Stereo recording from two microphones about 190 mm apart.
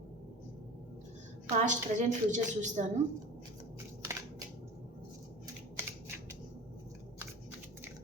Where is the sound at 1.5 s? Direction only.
40° right (ahead or behind).